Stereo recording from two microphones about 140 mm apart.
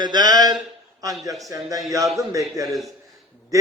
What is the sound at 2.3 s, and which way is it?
Speech, 25° right (ahead or behind).